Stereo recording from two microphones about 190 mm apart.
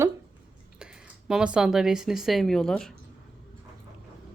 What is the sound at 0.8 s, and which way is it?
Speech, 5° right (ahead or behind).